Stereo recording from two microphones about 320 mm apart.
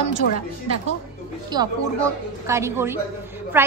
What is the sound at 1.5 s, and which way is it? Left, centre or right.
A woman's voice, centre.